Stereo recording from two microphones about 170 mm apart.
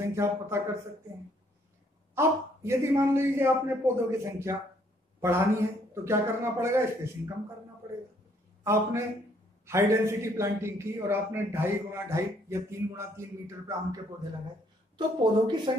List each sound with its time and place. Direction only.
0.1 s a man's voice: 15° right (ahead or behind)
2.1 s a man's voice: 15° right (ahead or behind)
8.6 s a man's voice: 15° right (ahead or behind)
15.0 s speech: 25° right (ahead or behind)